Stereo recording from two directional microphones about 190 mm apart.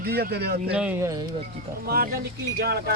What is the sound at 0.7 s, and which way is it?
Speech, 5° right (ahead or behind).